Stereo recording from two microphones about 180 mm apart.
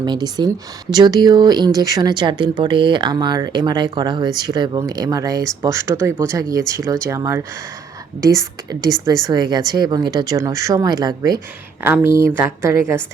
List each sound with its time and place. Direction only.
0.0 s a woman's voice: 25° right (ahead or behind)